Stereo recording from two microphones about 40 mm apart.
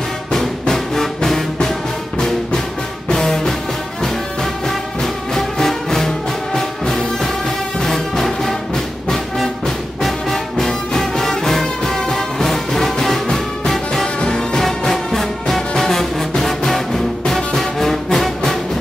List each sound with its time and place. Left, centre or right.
0.3 s music: centre
3.1 s music: centre
5.3 s music: centre
10.0 s music: centre
14.6 s music: centre